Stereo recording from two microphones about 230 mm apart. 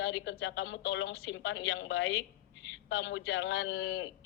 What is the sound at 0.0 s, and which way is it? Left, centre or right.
Speech, left.